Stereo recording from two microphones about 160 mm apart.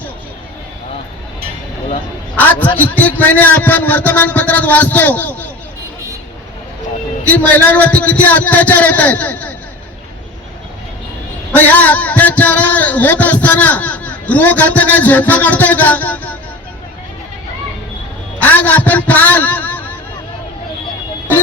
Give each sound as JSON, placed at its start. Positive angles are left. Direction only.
{"t": 2.4, "sound": "music", "side_deg": 10}
{"t": 7.3, "sound": "music", "side_deg": 10}
{"t": 11.5, "sound": "music", "side_deg": 10}
{"t": 18.3, "sound": "a man's voice", "side_deg": 10}